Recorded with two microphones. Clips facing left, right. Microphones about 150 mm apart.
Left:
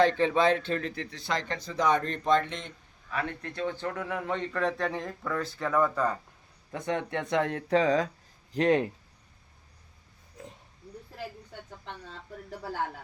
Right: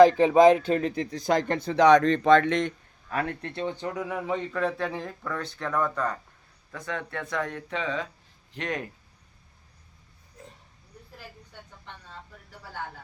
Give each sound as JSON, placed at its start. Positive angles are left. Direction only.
{"t": 0.4, "sound": "speech", "side_deg": -10}
{"t": 0.9, "sound": "speech", "side_deg": -40}
{"t": 3.1, "sound": "a man's voice", "side_deg": -40}
{"t": 6.7, "sound": "speech", "side_deg": 25}